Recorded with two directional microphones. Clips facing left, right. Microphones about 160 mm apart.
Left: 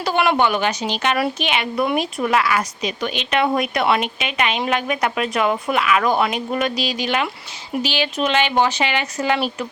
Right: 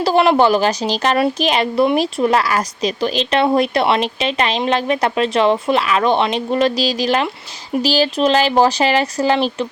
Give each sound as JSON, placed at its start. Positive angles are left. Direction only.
{"t": 0.0, "sound": "speech", "side_deg": -30}